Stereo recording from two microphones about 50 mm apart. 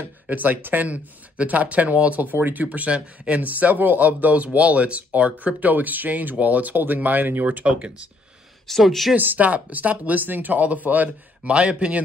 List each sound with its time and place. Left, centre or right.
0.0 s speech: right
0.8 s speech: right
8.6 s speech: centre
9.1 s speech: right
11.5 s a man's voice: right